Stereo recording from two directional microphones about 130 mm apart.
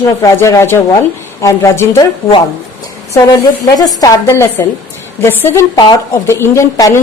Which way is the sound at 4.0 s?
25° left (ahead or behind).